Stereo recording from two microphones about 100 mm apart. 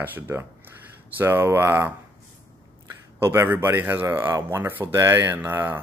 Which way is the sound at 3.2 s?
20° right (ahead or behind).